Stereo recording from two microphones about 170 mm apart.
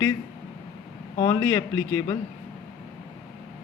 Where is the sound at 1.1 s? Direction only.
20° left (ahead or behind).